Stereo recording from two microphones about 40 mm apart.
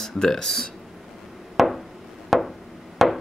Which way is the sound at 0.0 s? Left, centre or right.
Centre.